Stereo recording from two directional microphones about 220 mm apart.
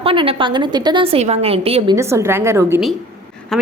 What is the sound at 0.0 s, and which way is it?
A woman's voice, 25° right (ahead or behind).